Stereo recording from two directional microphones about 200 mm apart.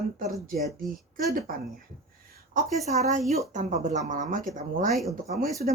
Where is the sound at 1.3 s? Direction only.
40° right (ahead or behind).